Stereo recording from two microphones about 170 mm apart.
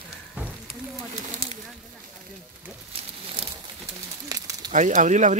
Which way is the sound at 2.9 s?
35° right (ahead or behind).